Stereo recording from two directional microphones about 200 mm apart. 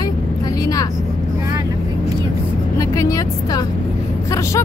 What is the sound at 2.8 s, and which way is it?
Speech, 15° left (ahead or behind).